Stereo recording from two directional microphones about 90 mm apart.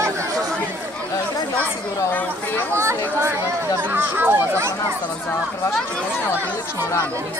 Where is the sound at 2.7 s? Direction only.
30° right (ahead or behind).